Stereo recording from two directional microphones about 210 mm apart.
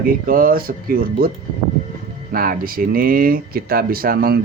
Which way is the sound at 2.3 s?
45° right (ahead or behind).